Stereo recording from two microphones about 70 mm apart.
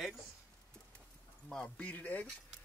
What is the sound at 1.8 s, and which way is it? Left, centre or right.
Speech, left.